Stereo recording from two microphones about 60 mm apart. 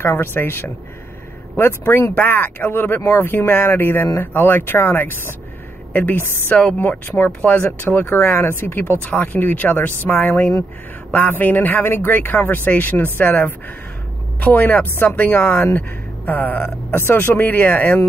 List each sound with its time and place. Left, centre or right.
0.0 s a man's voice: left